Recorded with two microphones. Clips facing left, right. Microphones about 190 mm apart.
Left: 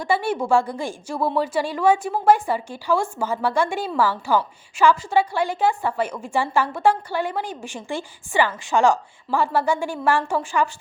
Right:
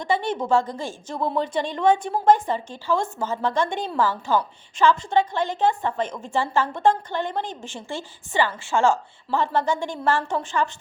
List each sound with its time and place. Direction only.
0.0 s a woman's voice: 10° left (ahead or behind)